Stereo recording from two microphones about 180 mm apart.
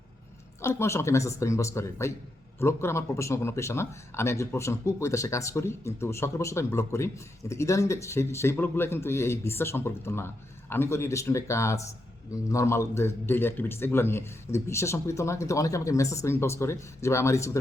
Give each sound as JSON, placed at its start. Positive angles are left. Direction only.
{"t": 0.6, "sound": "speech", "side_deg": 15}